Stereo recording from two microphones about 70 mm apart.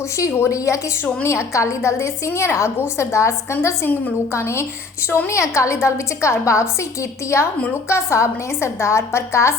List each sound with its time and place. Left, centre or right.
0.3 s a woman's voice: left